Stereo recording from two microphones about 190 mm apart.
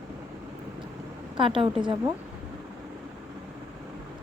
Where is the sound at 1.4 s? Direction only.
25° right (ahead or behind).